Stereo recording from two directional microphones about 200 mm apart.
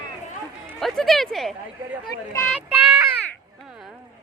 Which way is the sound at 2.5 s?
10° right (ahead or behind).